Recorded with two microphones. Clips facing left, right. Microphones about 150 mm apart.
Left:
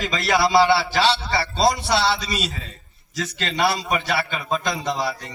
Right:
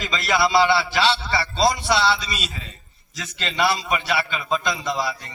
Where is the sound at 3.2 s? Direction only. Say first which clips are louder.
Left 4 dB; 60° left (ahead or behind).